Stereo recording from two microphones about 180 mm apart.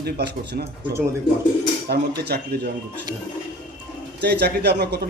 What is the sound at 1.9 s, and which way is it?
Speech, 60° right (ahead or behind).